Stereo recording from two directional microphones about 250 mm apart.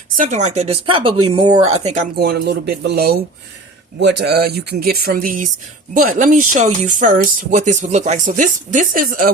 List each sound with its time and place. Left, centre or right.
0.2 s speech: right
2.1 s speech: right